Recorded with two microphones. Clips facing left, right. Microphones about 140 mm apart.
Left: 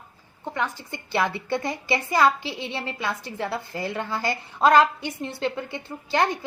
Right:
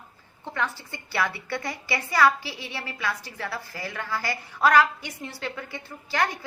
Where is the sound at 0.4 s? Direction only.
15° left (ahead or behind).